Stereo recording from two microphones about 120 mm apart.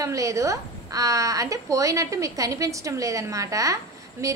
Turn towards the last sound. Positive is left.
turn(degrees=-25)  # may be behind; listen again after turning